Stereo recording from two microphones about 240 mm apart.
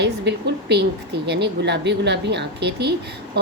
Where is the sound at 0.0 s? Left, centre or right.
Right.